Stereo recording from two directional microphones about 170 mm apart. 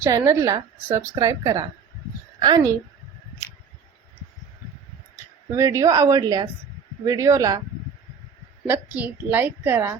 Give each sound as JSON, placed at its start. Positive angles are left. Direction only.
{"t": 0.0, "sound": "a woman's voice", "side_deg": -15}
{"t": 5.5, "sound": "a woman's voice", "side_deg": -15}
{"t": 9.0, "sound": "a woman's voice", "side_deg": -10}